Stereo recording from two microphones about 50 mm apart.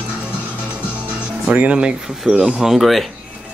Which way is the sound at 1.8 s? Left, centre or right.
Centre.